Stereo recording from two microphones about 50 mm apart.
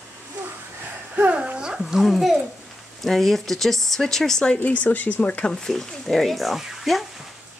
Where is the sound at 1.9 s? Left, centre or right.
Centre.